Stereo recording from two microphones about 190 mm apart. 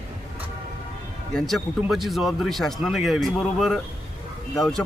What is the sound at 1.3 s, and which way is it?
Speech, centre (ahead or behind).